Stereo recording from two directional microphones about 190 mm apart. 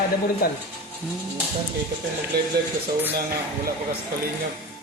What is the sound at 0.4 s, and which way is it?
Speech, 50° left (ahead or behind).